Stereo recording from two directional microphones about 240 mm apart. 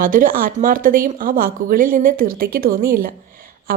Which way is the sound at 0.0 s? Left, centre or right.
Right.